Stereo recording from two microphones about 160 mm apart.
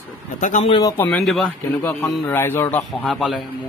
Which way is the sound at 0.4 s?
55° left (ahead or behind).